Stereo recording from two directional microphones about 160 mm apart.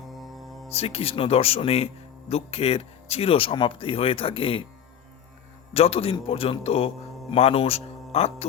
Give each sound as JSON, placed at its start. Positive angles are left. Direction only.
{"t": 0.1, "sound": "music", "side_deg": 0}
{"t": 0.7, "sound": "a man's voice", "side_deg": 40}
{"t": 5.7, "sound": "a man's voice", "side_deg": 35}